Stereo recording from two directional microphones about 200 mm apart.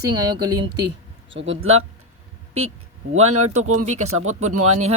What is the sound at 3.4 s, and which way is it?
Speech, 90° right.